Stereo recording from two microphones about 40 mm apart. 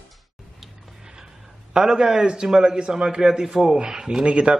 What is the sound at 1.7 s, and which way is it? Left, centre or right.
A man's voice, centre.